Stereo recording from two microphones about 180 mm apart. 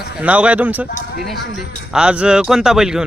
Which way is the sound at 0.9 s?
65° left (ahead or behind).